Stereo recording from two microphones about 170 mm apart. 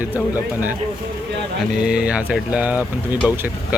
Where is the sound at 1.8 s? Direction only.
5° right (ahead or behind).